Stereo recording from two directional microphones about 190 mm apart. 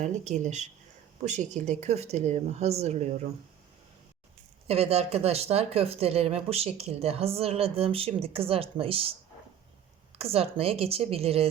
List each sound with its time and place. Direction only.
0.0 s speech: 40° right (ahead or behind)
4.7 s speech: 30° right (ahead or behind)
10.2 s speech: 30° right (ahead or behind)